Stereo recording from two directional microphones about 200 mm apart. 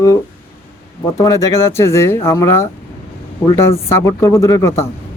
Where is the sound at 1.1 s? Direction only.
15° left (ahead or behind).